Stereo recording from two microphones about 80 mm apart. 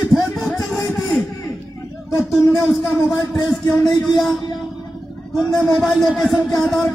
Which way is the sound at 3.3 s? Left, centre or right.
Centre.